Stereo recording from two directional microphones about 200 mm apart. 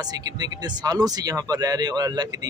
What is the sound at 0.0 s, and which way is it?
Speech, 20° right (ahead or behind).